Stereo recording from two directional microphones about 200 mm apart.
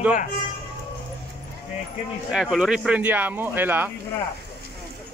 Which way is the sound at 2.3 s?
Centre (ahead or behind).